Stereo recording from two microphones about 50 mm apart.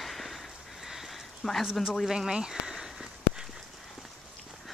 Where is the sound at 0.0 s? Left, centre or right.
Centre.